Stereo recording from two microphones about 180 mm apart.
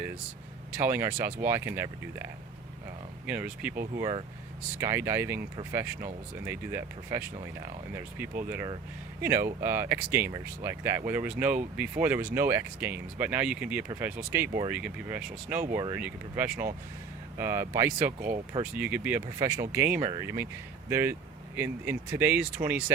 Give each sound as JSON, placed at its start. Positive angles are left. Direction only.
{"t": 0.8, "sound": "speech", "side_deg": -10}
{"t": 3.2, "sound": "speech", "side_deg": -5}
{"t": 3.9, "sound": "speech", "side_deg": -25}
{"t": 9.2, "sound": "speech", "side_deg": -15}